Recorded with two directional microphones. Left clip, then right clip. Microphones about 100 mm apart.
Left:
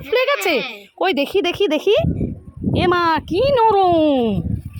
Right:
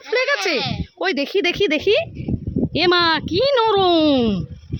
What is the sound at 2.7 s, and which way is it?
Speech, 30° right (ahead or behind).